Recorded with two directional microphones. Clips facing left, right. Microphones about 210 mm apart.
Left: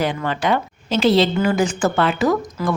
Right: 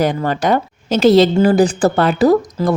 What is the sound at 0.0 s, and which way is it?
A woman's voice, 40° right (ahead or behind).